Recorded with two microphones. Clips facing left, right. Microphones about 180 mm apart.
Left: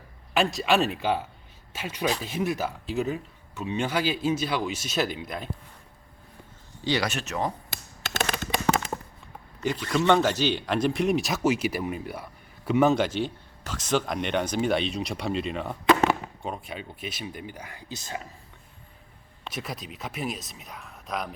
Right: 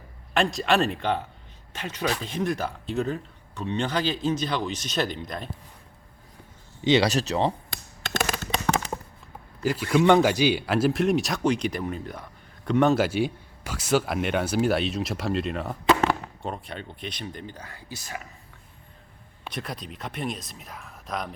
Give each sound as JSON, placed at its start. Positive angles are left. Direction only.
{"t": 0.3, "sound": "speech", "side_deg": 0}
{"t": 6.8, "sound": "speech", "side_deg": -25}
{"t": 7.1, "sound": "speech", "side_deg": -35}
{"t": 9.6, "sound": "speech", "side_deg": -10}
{"t": 19.5, "sound": "speech", "side_deg": 0}